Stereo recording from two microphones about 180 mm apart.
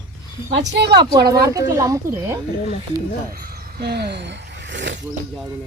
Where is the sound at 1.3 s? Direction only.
20° right (ahead or behind).